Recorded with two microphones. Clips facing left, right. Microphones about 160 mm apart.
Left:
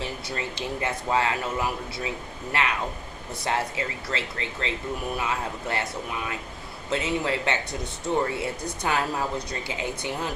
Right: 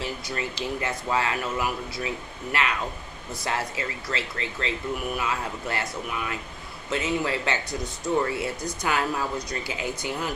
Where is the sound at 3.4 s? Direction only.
25° left (ahead or behind).